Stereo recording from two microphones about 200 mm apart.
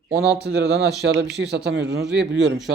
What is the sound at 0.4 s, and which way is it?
Speech, 55° right (ahead or behind).